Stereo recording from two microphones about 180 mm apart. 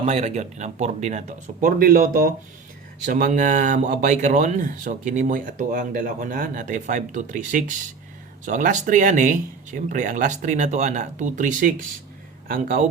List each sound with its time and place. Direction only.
0.0 s speech: 35° right (ahead or behind)
1.6 s speech: 50° right (ahead or behind)